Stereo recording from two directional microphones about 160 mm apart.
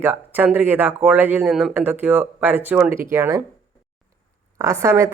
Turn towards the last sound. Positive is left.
turn(degrees=-15)  # may be behind; listen again after turning